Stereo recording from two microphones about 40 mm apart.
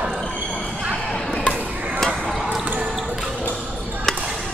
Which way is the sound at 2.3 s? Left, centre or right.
Centre.